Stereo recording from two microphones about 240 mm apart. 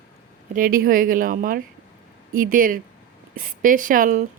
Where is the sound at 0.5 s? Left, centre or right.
Right.